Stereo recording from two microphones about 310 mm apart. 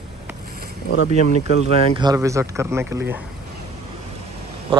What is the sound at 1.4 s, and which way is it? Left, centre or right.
Speech, centre.